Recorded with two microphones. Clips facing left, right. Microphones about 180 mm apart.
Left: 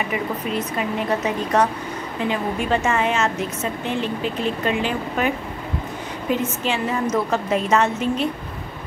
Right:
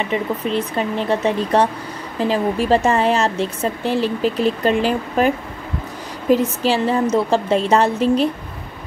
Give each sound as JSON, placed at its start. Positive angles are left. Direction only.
{"t": 0.1, "sound": "a woman's voice", "side_deg": -30}
{"t": 6.3, "sound": "a woman's voice", "side_deg": -35}